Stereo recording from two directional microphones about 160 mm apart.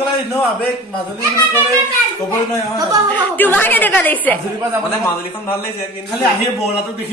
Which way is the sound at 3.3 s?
10° left (ahead or behind).